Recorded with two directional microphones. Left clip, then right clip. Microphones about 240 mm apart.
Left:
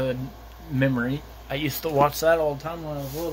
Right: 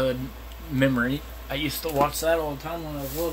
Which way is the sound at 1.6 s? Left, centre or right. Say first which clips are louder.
Left 3 dB; centre.